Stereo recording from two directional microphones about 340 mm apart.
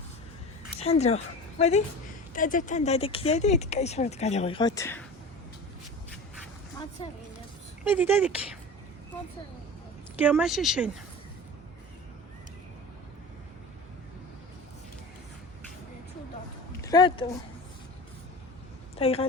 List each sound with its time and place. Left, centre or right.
0.8 s speech: centre
7.0 s a woman's voice: centre
7.9 s speech: centre
10.2 s speech: centre
16.8 s speech: centre
18.9 s speech: centre